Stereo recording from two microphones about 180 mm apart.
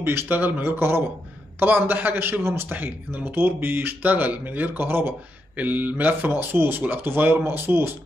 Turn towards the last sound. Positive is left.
turn(degrees=-15)  # may be behind; listen again after turning